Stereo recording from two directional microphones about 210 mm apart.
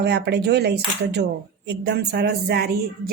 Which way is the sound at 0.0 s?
50° right (ahead or behind).